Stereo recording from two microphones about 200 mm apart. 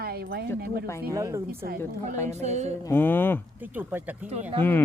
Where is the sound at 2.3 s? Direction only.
35° right (ahead or behind).